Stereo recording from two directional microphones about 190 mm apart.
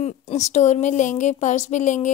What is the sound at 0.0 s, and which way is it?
A woman's voice, 35° left (ahead or behind).